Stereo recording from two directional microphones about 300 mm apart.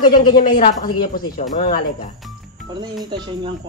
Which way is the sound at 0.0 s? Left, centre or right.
Centre.